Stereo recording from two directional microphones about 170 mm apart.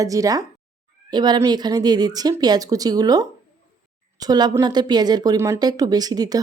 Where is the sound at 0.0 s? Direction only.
20° right (ahead or behind).